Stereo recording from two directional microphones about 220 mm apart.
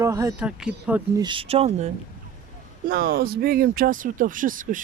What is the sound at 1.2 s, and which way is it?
Speech, 25° right (ahead or behind).